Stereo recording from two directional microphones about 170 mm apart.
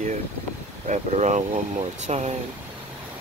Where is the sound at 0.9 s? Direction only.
45° right (ahead or behind).